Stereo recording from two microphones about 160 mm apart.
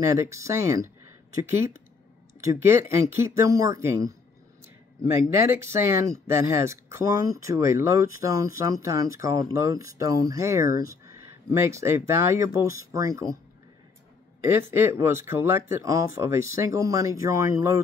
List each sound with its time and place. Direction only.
0.1 s speech: 20° right (ahead or behind)
2.5 s speech: 15° right (ahead or behind)
14.7 s speech: 15° right (ahead or behind)